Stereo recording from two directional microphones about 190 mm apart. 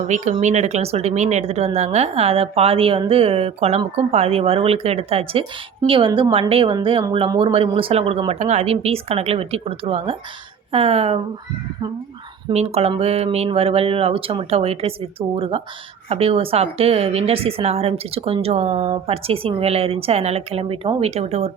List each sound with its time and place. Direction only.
0.1 s speech: 40° right (ahead or behind)
12.5 s speech: 30° right (ahead or behind)